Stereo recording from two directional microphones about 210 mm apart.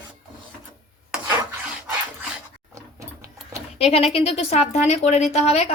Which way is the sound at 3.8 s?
30° left (ahead or behind).